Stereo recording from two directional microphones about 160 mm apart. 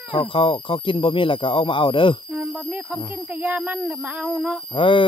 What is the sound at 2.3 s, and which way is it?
Speech, 10° right (ahead or behind).